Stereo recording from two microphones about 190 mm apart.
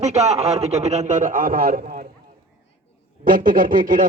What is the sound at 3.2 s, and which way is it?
Speech, 45° right (ahead or behind).